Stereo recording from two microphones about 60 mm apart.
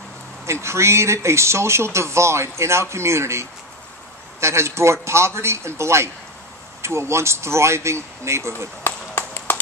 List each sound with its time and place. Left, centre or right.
0.5 s speech: right
8.8 s run: left